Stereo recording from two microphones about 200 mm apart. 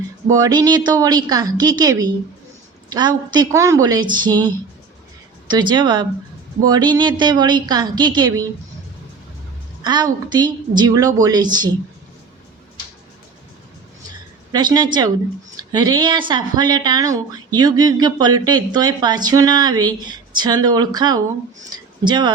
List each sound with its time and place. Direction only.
0.3 s speech: 20° right (ahead or behind)
3.3 s speech: 15° right (ahead or behind)
9.8 s speech: 20° right (ahead or behind)
14.1 s a sound: 20° right (ahead or behind)
15.5 s speech: 20° right (ahead or behind)